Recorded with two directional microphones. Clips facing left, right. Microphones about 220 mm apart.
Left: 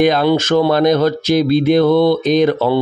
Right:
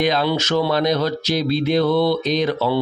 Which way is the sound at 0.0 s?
50° left (ahead or behind).